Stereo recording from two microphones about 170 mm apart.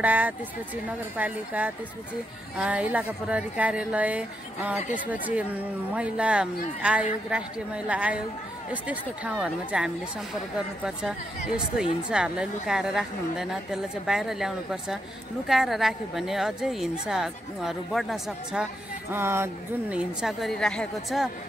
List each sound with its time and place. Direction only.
0.0 s a woman's voice: 10° right (ahead or behind)
4.7 s speech: 45° left (ahead or behind)
5.1 s a woman's voice: 10° right (ahead or behind)
11.0 s a woman's voice: 5° right (ahead or behind)